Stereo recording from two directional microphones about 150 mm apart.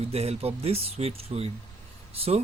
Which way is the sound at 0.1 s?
45° right (ahead or behind).